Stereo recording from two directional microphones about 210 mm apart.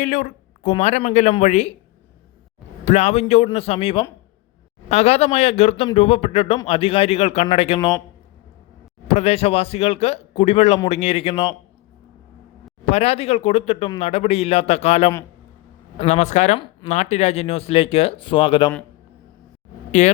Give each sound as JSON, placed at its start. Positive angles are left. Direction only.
{"t": 0.0, "sound": "speech", "side_deg": 35}
{"t": 2.8, "sound": "speech", "side_deg": 30}
{"t": 9.0, "sound": "speech", "side_deg": 30}
{"t": 12.9, "sound": "speech", "side_deg": 30}
{"t": 20.0, "sound": "speech", "side_deg": 35}